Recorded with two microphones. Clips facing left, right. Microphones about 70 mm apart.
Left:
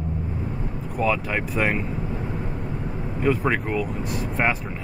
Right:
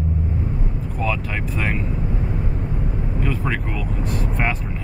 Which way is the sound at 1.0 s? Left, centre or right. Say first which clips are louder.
Left 2 dB; centre.